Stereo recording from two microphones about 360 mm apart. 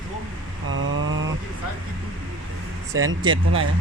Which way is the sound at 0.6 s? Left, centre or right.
Right.